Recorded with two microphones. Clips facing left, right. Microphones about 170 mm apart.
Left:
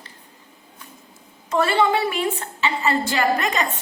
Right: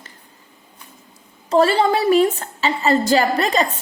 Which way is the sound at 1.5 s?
35° right (ahead or behind).